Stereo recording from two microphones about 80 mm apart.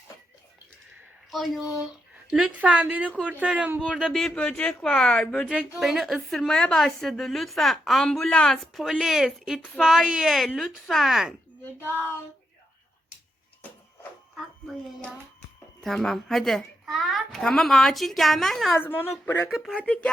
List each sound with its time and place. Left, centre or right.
1.3 s a woman's voice: centre
2.3 s a woman's voice: centre
4.4 s speech: centre
5.7 s a woman's voice: centre
9.6 s speech: centre
9.8 s a woman's voice: centre
11.9 s speech: left
15.8 s a woman's voice: centre
18.8 s speech: left
19.5 s a woman's voice: centre
19.8 s speech: centre